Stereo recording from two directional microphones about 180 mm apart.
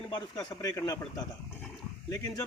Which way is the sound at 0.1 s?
20° left (ahead or behind).